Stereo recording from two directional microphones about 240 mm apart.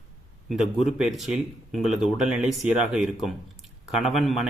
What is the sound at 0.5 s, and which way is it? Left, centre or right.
Speech, centre.